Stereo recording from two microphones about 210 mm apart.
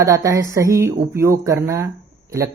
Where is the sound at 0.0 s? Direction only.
15° right (ahead or behind).